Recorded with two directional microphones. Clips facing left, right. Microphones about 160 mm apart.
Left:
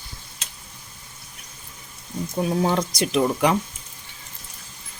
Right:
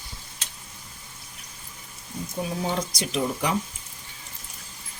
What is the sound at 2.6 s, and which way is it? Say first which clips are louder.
Speech: left 5 dB; 65° left (ahead or behind).